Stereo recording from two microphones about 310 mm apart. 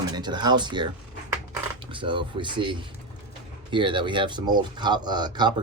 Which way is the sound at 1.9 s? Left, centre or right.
Centre.